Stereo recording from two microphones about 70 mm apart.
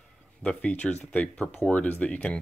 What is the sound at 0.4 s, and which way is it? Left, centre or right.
Speech, centre.